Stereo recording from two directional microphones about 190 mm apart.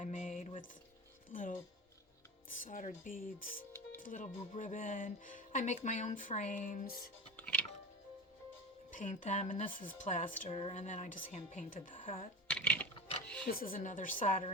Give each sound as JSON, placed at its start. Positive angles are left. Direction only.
{"t": 0.0, "sound": "a sound", "side_deg": 40}
{"t": 1.3, "sound": "music", "side_deg": 45}
{"t": 2.6, "sound": "speech", "side_deg": 45}
{"t": 7.3, "sound": "music", "side_deg": 10}
{"t": 8.9, "sound": "speech", "side_deg": 40}
{"t": 12.5, "sound": "a sound", "side_deg": 5}
{"t": 13.5, "sound": "a woman's voice", "side_deg": 50}